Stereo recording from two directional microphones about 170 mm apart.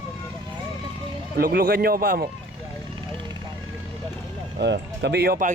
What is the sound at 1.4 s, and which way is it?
Speech, 60° right (ahead or behind).